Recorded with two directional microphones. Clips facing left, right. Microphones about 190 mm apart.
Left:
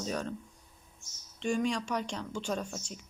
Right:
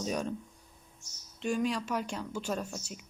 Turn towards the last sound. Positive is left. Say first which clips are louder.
# even
turn(degrees=-5)  # may be behind; listen again after turning